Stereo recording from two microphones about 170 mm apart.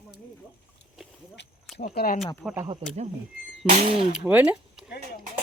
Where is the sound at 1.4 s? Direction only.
90° left.